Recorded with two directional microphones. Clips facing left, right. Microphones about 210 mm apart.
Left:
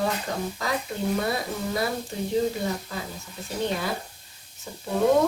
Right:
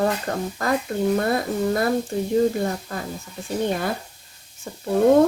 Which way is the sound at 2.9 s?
50° right (ahead or behind).